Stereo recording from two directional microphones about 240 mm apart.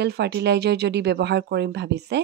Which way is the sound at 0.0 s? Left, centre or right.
Right.